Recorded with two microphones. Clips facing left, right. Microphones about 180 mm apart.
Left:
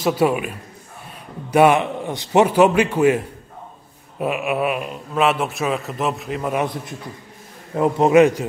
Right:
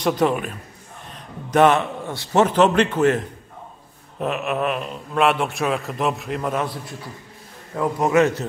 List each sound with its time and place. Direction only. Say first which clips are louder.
0.0 s a man's voice: left 1 dB; 5° left (ahead or behind)
6.5 s a man's voice: left 3 dB; 20° left (ahead or behind)